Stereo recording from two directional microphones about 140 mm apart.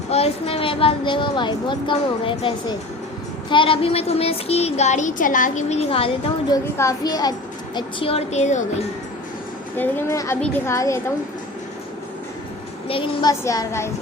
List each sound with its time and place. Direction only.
0.1 s a woman's voice: 45° left (ahead or behind)
6.5 s a child's voice: 25° left (ahead or behind)
7.8 s speech: 40° left (ahead or behind); by 8.6 s 55° left (ahead or behind)
9.7 s a child's voice: 15° left (ahead or behind)
12.9 s a woman's voice: 40° left (ahead or behind)
13.4 s a child's voice: 20° left (ahead or behind)